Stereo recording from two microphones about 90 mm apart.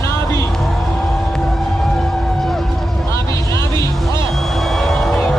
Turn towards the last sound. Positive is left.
turn(degrees=5)  # may be behind; listen again after turning